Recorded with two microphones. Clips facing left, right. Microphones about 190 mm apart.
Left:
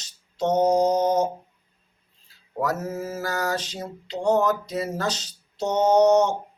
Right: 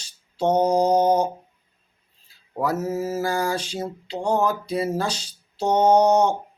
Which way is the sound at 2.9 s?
30° right (ahead or behind).